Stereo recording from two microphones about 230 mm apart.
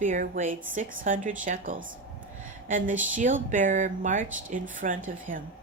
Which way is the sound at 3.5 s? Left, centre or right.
Right.